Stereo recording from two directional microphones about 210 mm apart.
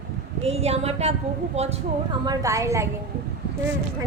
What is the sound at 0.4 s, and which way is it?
A woman's voice, 30° right (ahead or behind).